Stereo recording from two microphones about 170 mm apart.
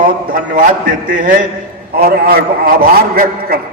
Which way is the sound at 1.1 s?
50° right (ahead or behind).